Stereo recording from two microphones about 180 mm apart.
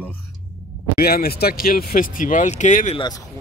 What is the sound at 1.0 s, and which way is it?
Speech, 55° left (ahead or behind).